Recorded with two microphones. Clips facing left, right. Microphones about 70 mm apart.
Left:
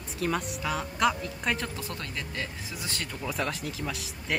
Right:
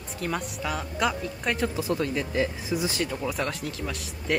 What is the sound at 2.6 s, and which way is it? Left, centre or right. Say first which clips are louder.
Speech: right 10 dB; centre.